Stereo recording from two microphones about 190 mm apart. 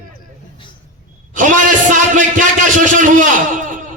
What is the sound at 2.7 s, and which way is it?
A man's voice, 45° right (ahead or behind).